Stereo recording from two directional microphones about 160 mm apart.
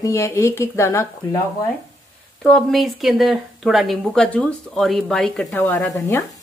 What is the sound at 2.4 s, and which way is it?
A woman's voice, centre (ahead or behind).